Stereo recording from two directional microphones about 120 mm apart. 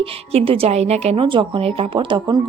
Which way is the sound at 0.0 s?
55° right (ahead or behind).